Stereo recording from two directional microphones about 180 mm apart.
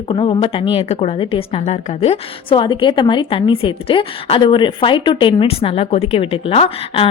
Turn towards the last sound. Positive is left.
turn(degrees=30)  # may be behind; listen again after turning